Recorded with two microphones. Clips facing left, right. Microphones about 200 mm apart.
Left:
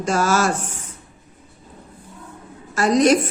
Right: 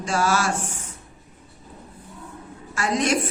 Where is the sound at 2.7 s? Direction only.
40° left (ahead or behind).